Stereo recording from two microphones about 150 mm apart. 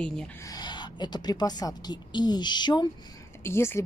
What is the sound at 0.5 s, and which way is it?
A woman's voice, 30° left (ahead or behind).